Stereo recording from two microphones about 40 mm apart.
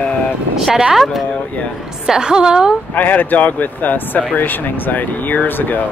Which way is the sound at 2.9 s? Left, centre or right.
Left.